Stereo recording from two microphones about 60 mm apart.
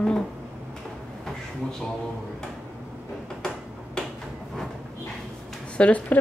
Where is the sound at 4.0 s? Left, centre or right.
Centre.